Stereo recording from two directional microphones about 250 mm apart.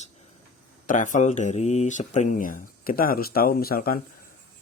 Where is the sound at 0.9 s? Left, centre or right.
Left.